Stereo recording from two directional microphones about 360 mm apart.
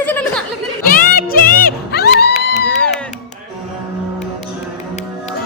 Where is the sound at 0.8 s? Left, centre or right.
Left.